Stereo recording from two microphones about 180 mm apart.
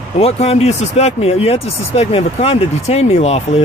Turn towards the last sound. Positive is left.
turn(degrees=35)  # may be behind; listen again after turning